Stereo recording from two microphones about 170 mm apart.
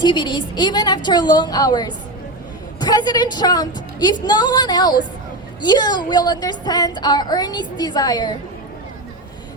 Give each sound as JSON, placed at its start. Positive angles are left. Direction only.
{"t": 0.0, "sound": "a woman's voice", "side_deg": 25}